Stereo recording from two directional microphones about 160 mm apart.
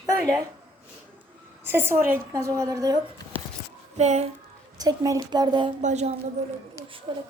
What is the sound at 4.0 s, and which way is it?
Speech, 45° right (ahead or behind).